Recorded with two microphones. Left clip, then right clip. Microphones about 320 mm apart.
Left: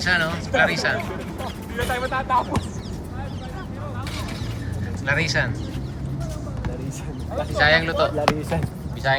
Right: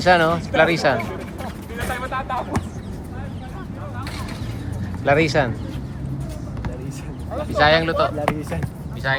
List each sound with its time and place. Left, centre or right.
0.0 s speech: centre
1.9 s a sound: left
5.0 s speech: centre
7.3 s speech: centre
8.4 s speech: left
9.0 s speech: centre